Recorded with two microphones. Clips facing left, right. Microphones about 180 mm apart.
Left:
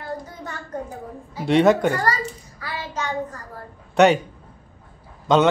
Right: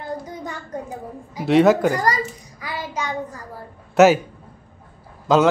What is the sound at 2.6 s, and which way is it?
Child singing, 15° right (ahead or behind).